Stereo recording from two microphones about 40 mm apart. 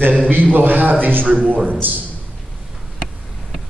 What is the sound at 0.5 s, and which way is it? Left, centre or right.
Speech, right.